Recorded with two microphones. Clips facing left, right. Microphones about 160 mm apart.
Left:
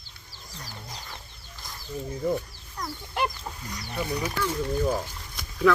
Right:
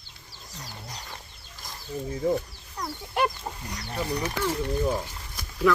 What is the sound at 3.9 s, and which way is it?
Speech, 10° left (ahead or behind).